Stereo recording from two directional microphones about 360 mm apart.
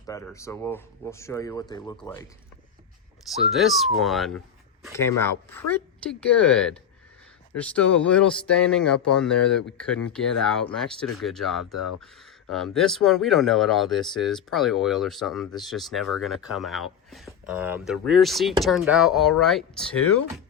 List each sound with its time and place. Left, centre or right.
0.0 s speech: centre
3.5 s speech: centre
11.6 s speech: left
11.9 s speech: centre